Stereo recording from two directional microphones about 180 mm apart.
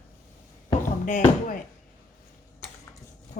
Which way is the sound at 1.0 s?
45° left (ahead or behind).